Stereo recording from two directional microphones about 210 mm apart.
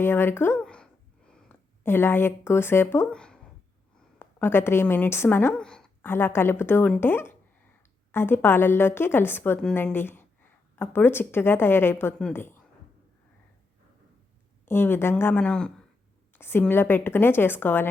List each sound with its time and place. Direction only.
0.0 s a sound: 10° left (ahead or behind)
4.2 s a woman's voice: 10° left (ahead or behind)
14.6 s a woman's voice: 10° left (ahead or behind)